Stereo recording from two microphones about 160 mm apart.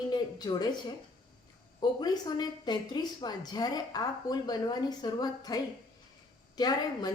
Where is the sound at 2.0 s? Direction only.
25° left (ahead or behind).